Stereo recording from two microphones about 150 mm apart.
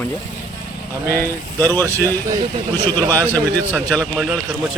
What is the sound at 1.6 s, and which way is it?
A man's voice, 15° left (ahead or behind).